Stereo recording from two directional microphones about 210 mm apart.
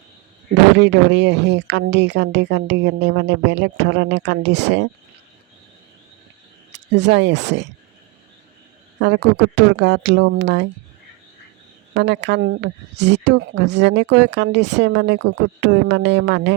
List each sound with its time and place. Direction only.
0.8 s speech: 55° right (ahead or behind)
6.9 s speech: 55° right (ahead or behind)
9.0 s speech: 60° right (ahead or behind)
11.9 s speech: 55° right (ahead or behind)